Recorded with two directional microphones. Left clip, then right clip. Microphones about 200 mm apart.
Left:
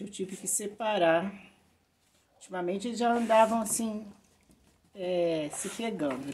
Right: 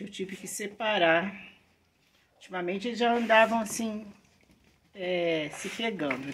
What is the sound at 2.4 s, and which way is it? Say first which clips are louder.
Speech: right 1 dB; 5° left (ahead or behind).